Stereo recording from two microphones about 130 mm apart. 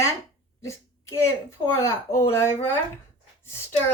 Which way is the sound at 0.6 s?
20° left (ahead or behind).